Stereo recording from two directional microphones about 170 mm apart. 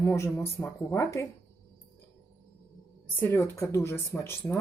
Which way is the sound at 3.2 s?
15° left (ahead or behind).